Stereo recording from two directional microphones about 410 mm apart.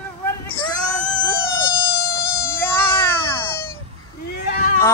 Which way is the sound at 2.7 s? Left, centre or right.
Centre.